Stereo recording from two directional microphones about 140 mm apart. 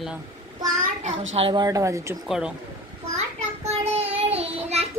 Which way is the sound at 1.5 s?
25° right (ahead or behind).